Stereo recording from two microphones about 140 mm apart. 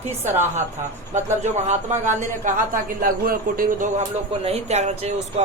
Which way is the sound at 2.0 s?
70° right (ahead or behind).